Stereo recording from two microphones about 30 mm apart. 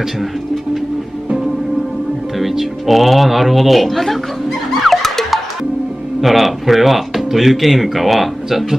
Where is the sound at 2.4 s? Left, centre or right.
Centre.